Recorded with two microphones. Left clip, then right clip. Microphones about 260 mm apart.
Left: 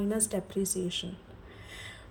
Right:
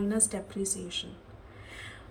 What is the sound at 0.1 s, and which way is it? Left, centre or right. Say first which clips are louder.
Speech: left 1 dB; left.